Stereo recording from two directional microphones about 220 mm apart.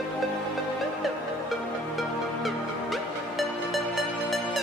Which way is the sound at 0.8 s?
Centre (ahead or behind).